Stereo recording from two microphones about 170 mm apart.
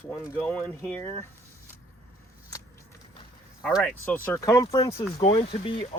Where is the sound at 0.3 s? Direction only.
10° left (ahead or behind).